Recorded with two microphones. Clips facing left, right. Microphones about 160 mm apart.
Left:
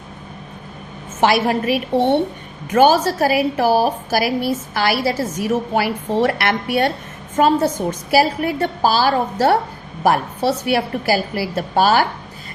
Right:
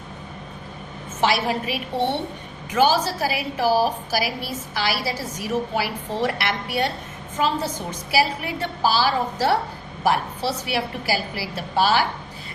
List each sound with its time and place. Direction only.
1.2 s a woman's voice: 55° left (ahead or behind)
8.1 s a woman's voice: 50° left (ahead or behind)